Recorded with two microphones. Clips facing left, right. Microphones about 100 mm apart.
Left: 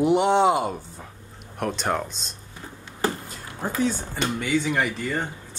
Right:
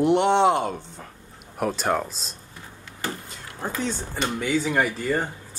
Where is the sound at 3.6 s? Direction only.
5° left (ahead or behind).